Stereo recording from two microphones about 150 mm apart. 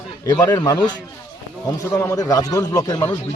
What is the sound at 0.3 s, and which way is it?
Speech, 20° left (ahead or behind).